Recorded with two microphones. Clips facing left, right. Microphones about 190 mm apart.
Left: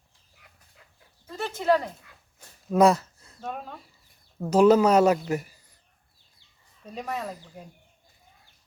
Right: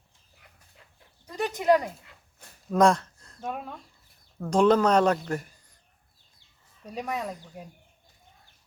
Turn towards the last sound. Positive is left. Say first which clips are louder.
# right 1 dB
turn(degrees=0)  # may be behind; listen again after turning